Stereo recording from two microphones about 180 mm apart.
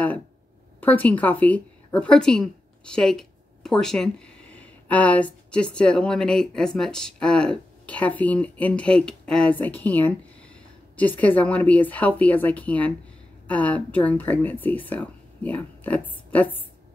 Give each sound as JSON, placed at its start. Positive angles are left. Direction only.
{"t": 0.7, "sound": "a woman's voice", "side_deg": 10}